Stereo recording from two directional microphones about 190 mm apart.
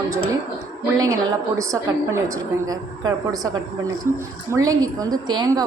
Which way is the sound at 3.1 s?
20° right (ahead or behind).